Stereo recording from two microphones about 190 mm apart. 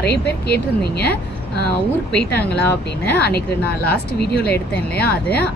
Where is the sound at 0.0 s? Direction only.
55° left (ahead or behind).